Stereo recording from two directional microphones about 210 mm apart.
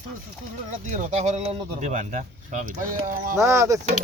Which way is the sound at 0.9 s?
35° right (ahead or behind).